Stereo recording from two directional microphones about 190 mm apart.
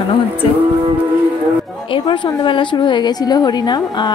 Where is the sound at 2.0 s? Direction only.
25° left (ahead or behind).